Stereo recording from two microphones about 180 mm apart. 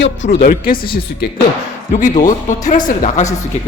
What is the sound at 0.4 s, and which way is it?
Speech, 50° left (ahead or behind).